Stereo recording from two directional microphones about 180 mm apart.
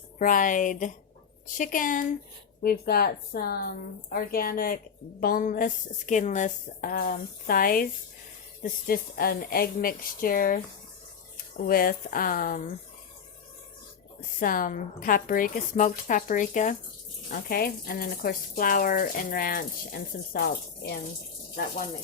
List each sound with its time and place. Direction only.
0.2 s speech: 50° left (ahead or behind)
14.2 s speech: 50° left (ahead or behind)